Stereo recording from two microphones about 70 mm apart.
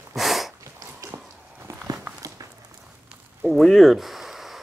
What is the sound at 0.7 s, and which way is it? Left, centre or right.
Walk, right.